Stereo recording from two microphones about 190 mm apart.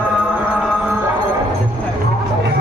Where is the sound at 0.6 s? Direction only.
5° right (ahead or behind).